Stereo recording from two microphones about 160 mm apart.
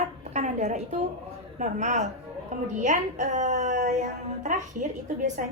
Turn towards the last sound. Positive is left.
turn(degrees=-55)  # may be behind; listen again after turning